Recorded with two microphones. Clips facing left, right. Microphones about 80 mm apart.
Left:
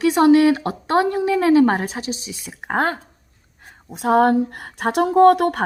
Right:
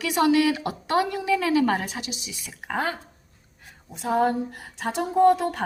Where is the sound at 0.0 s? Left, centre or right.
Left.